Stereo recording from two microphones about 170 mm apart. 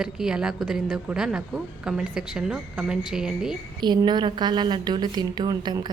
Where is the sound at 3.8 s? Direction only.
25° right (ahead or behind).